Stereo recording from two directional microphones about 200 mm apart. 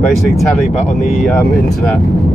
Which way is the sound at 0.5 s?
Centre (ahead or behind).